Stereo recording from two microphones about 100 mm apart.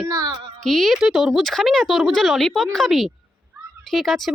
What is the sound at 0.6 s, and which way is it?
Speech, centre (ahead or behind).